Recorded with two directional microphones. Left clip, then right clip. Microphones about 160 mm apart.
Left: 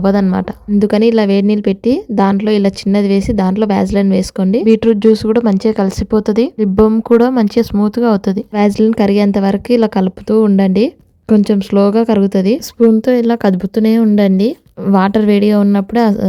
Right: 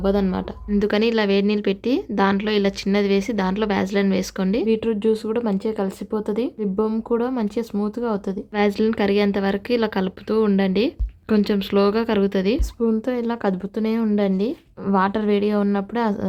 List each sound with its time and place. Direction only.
0.0 s a woman's voice: 40° left (ahead or behind)